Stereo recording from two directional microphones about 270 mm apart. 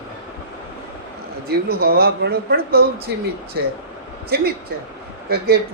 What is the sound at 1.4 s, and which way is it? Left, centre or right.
A woman's voice, right.